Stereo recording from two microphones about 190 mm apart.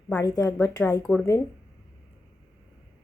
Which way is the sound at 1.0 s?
5° left (ahead or behind).